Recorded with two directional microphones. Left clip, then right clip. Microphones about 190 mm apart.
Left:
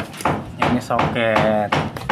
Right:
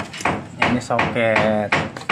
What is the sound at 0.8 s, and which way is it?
Speech, 35° right (ahead or behind).